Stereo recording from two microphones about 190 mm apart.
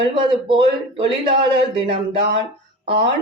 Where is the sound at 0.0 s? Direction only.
25° right (ahead or behind).